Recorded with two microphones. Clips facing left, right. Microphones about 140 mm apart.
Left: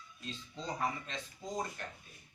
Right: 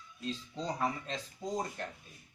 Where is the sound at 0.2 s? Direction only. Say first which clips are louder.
Right 7 dB; 35° right (ahead or behind).